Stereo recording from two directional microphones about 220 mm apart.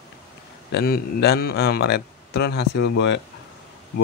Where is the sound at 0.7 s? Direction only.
45° left (ahead or behind).